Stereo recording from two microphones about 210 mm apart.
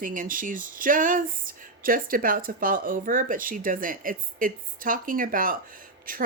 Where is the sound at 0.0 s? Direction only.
40° right (ahead or behind).